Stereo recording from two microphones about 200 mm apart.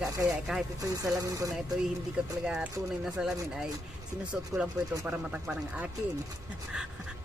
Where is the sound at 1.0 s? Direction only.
15° right (ahead or behind).